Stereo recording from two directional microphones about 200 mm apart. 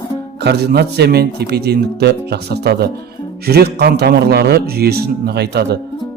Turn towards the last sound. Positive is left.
turn(degrees=-55)  # may be behind; listen again after turning